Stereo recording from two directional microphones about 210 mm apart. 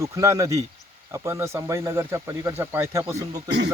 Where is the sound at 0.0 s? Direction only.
15° right (ahead or behind).